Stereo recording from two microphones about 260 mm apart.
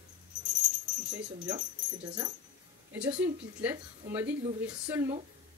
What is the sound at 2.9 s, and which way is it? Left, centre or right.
A woman's voice, centre.